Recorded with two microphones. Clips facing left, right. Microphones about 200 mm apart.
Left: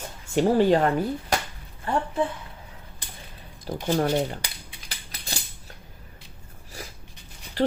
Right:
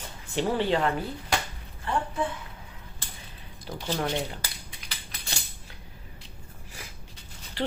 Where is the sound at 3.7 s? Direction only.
45° left (ahead or behind).